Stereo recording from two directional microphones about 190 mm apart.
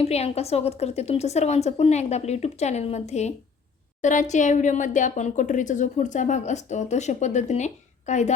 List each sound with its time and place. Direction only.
0.0 s speech: 35° left (ahead or behind)